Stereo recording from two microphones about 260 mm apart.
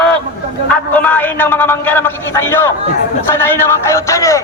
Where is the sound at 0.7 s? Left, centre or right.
Centre.